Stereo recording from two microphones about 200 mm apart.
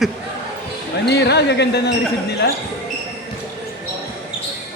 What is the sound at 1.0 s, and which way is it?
Speech, 55° left (ahead or behind).